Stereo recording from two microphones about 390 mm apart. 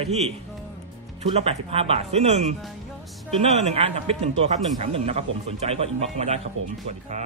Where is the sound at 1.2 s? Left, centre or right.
Centre.